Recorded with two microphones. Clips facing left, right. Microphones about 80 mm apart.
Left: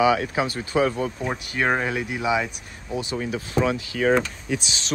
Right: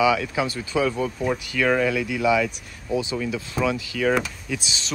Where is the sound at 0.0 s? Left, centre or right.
Left.